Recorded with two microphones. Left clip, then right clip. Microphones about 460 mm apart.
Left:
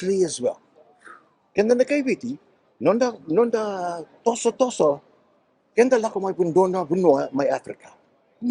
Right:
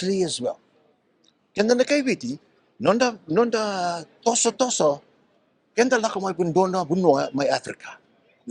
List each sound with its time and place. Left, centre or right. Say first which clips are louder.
0.0 s speech: left 2 dB; centre